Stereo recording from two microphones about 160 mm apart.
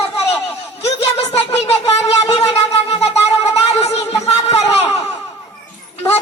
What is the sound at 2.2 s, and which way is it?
Wind instrument, 40° left (ahead or behind).